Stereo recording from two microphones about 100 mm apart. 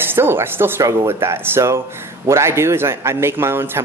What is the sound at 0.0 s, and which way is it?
A man's voice, 20° right (ahead or behind).